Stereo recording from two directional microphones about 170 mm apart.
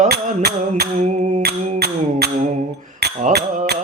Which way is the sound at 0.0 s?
70° right (ahead or behind).